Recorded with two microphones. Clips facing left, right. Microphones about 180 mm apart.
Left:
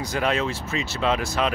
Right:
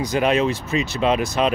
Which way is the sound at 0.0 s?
20° right (ahead or behind).